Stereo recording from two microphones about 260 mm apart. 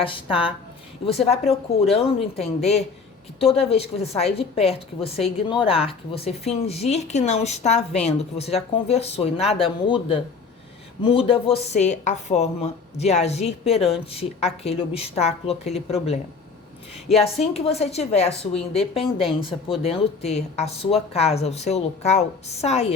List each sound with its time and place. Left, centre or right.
0.0 s a woman's voice: centre
17.2 s a woman's voice: left